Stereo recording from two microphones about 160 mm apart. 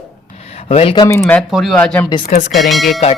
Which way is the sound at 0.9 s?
25° left (ahead or behind).